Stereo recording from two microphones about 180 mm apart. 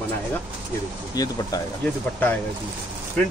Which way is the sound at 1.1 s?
20° left (ahead or behind).